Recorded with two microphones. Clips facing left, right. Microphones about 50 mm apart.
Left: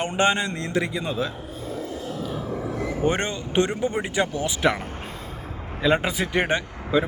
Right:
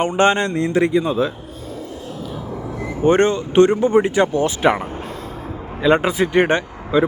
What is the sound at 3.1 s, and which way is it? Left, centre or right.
Speech, right.